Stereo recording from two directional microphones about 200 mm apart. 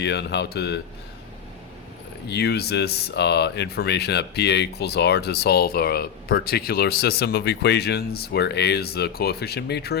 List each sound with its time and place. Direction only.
0.0 s speech: 60° left (ahead or behind)
2.2 s speech: 55° left (ahead or behind)